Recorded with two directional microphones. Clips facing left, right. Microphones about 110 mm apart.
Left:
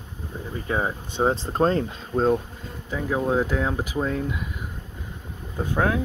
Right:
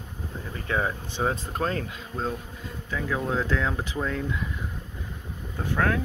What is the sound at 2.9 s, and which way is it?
Speech, 25° left (ahead or behind).